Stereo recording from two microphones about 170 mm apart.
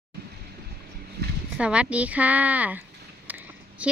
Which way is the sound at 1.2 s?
75° right (ahead or behind).